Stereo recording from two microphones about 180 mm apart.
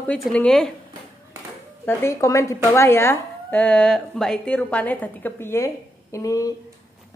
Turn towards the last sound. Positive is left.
turn(degrees=20)  # may be behind; listen again after turning